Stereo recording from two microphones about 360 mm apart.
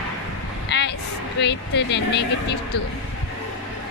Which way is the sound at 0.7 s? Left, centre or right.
Left.